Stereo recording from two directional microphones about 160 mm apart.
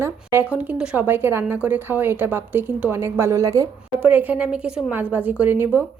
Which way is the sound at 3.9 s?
10° right (ahead or behind).